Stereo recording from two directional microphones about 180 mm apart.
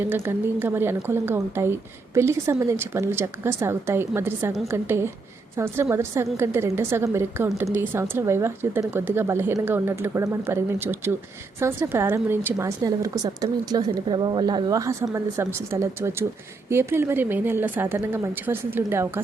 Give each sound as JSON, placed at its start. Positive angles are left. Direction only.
{"t": 0.0, "sound": "speech", "side_deg": -10}